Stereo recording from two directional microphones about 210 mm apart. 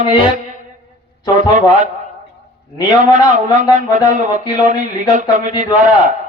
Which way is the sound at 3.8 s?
35° right (ahead or behind).